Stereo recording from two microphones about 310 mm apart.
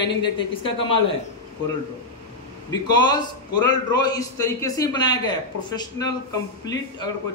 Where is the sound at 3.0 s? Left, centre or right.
Centre.